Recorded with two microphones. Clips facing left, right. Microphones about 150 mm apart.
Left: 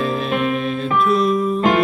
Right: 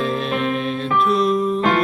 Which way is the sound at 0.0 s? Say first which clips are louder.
Left 1 dB; centre (ahead or behind).